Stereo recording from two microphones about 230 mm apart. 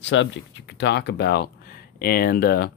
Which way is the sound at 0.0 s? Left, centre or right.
Left.